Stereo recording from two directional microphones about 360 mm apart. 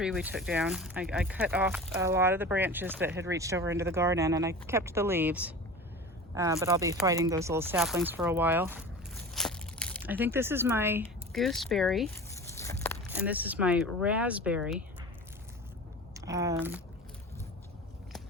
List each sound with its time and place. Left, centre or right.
0.0 s speech: centre
9.3 s a sound: centre
11.0 s speech: centre
16.1 s speech: centre